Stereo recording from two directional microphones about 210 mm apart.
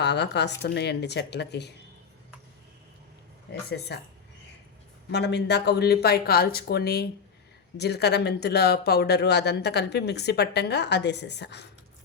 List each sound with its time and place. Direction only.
0.0 s speech: 55° left (ahead or behind)
3.7 s speech: 55° left (ahead or behind)
5.1 s speech: 55° left (ahead or behind)